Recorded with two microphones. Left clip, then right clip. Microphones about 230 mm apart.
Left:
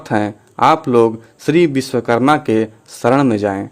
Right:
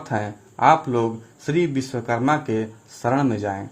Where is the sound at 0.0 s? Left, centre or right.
Left.